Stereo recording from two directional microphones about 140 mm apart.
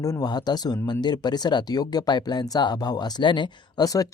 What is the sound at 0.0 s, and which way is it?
Speech, 25° left (ahead or behind).